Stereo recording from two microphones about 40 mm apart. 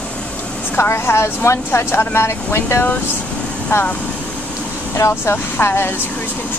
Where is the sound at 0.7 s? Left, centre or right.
Left.